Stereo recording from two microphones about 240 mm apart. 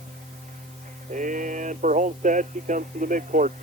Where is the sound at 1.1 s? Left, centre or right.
Right.